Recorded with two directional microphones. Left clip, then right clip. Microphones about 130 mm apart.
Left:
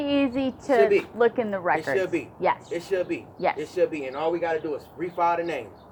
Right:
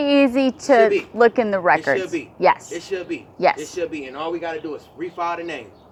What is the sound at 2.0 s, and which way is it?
Speech, 20° right (ahead or behind).